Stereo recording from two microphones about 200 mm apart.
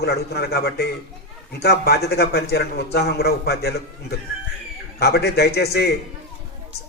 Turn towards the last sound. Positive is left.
turn(degrees=55)  # may be behind; listen again after turning